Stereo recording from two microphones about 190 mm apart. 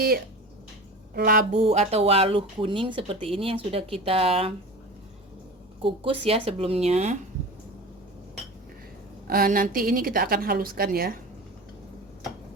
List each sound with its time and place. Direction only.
1.1 s a woman's voice: 50° right (ahead or behind)
1.5 s speech: 35° right (ahead or behind)
5.8 s speech: 30° right (ahead or behind)
9.2 s a woman's voice: 50° right (ahead or behind)